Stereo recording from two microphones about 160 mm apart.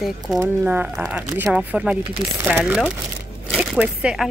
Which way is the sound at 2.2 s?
25° right (ahead or behind).